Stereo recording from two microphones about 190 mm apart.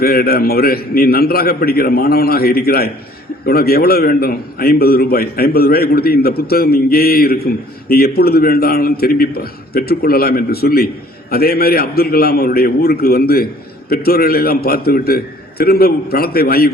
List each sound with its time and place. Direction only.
0.0 s a man's voice: 55° left (ahead or behind)